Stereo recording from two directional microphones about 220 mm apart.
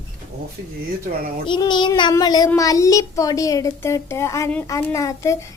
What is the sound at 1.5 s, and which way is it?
Child singing, 20° left (ahead or behind).